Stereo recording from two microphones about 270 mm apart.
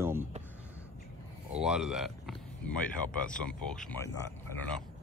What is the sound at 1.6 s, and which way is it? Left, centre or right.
Speech, centre.